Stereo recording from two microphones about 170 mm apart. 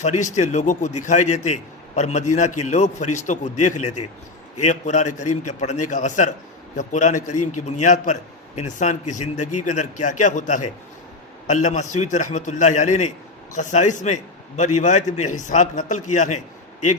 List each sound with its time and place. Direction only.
0.0 s a man's voice: 45° left (ahead or behind)